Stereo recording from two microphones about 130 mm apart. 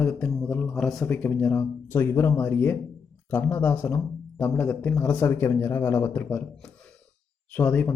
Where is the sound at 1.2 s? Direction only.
15° left (ahead or behind).